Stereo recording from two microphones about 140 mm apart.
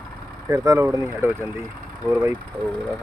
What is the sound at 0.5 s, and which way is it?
Speech, 25° right (ahead or behind).